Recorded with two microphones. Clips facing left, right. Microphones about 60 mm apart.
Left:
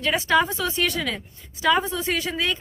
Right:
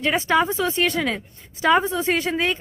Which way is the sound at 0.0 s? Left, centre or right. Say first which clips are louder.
Right 1 dB; right.